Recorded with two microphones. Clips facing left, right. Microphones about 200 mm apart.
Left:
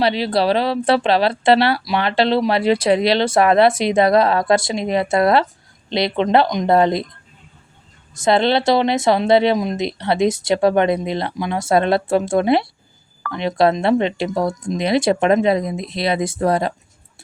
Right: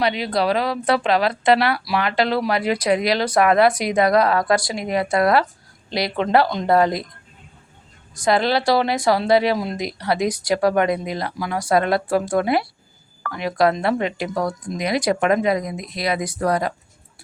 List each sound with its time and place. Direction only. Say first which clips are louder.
0.0 s speech: left 3 dB; 30° left (ahead or behind)
8.1 s speech: left 3 dB; 25° left (ahead or behind)